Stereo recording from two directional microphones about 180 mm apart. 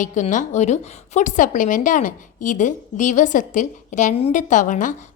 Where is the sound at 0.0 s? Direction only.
40° left (ahead or behind).